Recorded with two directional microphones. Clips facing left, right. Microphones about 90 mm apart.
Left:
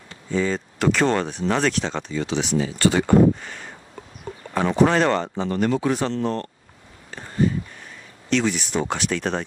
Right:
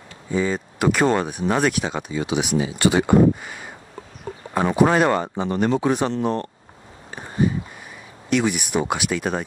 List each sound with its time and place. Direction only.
0.3 s speech: 10° right (ahead or behind)
7.2 s a sound: 15° right (ahead or behind)
8.3 s speech: 15° right (ahead or behind)